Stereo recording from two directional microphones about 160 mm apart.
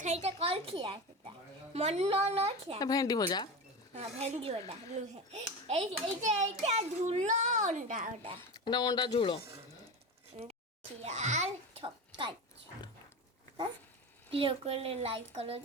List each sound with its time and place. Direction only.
0.0 s a child's voice: 45° right (ahead or behind)
1.7 s a woman's voice: 40° right (ahead or behind)
2.8 s speech: 20° left (ahead or behind)
3.9 s a woman's voice: 40° right (ahead or behind)
8.5 s speech: 25° left (ahead or behind)
11.0 s a child's voice: 45° right (ahead or behind)
14.3 s a woman's voice: 35° right (ahead or behind)